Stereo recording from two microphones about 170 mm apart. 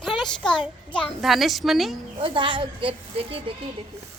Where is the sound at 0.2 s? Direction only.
5° left (ahead or behind).